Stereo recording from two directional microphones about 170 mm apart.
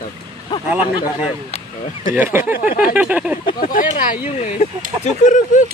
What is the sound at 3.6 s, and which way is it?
Speech, 55° left (ahead or behind).